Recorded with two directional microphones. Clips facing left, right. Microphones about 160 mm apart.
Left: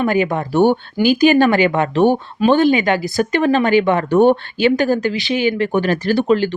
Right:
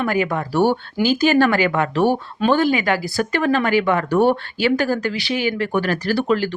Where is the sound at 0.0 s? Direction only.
20° left (ahead or behind).